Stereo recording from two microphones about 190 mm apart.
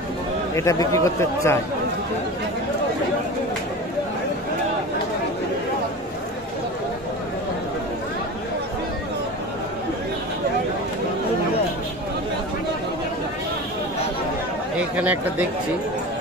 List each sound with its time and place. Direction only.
0.6 s speech: 15° left (ahead or behind)
14.8 s speech: 10° right (ahead or behind)